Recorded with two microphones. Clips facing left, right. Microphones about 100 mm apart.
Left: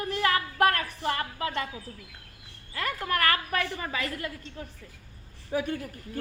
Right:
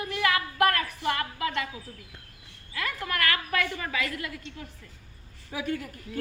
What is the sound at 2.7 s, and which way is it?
A woman's voice, 35° left (ahead or behind).